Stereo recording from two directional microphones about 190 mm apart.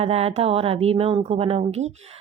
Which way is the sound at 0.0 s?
30° right (ahead or behind).